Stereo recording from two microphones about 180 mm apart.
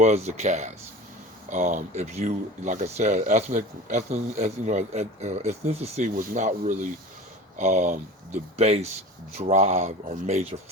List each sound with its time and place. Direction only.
0.0 s speech: 35° right (ahead or behind)